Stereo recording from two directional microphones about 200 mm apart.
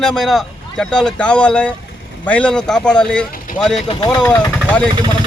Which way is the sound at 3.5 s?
45° left (ahead or behind).